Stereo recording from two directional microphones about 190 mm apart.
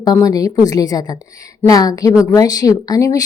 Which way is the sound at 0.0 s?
20° left (ahead or behind).